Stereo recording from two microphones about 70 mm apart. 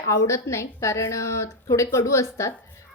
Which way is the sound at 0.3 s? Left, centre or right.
Left.